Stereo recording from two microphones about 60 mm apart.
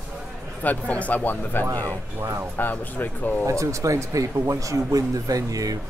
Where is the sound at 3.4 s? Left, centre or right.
Right.